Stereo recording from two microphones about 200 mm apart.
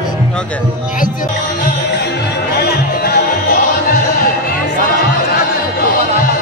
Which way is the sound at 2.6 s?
50° left (ahead or behind).